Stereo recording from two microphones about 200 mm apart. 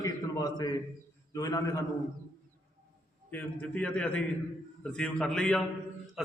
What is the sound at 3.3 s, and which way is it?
A man's voice, 5° left (ahead or behind).